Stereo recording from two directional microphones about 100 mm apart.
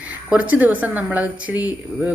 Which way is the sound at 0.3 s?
15° right (ahead or behind).